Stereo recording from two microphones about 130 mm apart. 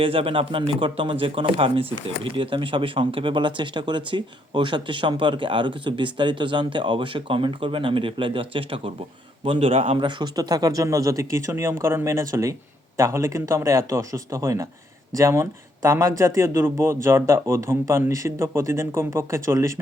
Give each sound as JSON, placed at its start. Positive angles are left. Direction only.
{"t": 0.0, "sound": "a man's voice", "side_deg": -45}